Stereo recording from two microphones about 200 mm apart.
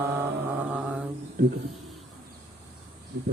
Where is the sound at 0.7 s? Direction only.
5° right (ahead or behind).